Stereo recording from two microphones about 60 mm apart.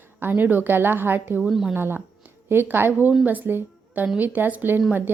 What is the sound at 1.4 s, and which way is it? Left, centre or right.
Speech, centre.